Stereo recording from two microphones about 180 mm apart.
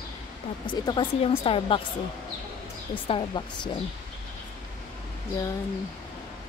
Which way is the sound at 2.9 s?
30° left (ahead or behind).